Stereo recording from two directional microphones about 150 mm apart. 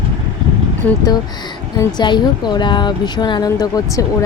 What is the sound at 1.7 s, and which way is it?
Speech, 30° left (ahead or behind).